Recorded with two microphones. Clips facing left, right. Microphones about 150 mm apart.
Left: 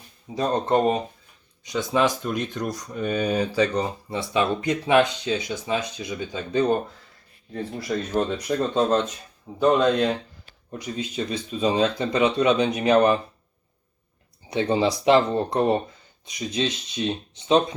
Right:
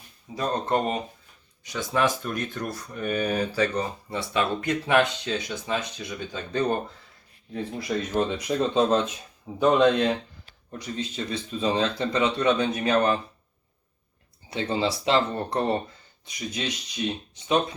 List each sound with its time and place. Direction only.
0.3 s speech: 20° left (ahead or behind)
7.5 s speech: centre (ahead or behind)
10.7 s speech: 10° left (ahead or behind)
14.5 s speech: 20° left (ahead or behind)